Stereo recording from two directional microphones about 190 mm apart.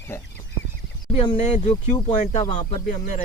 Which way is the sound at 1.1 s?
25° left (ahead or behind).